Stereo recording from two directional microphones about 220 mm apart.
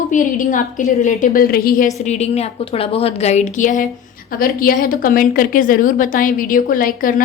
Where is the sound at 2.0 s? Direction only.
30° left (ahead or behind).